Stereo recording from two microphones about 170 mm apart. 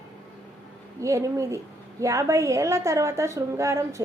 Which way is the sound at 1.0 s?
20° right (ahead or behind).